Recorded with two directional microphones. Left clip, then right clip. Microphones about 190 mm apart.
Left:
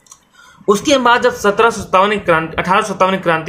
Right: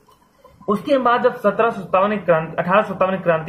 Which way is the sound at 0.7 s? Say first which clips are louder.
Left 6 dB; 50° left (ahead or behind).